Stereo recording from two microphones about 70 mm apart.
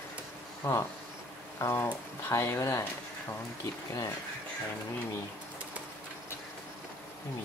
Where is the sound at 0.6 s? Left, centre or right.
Left.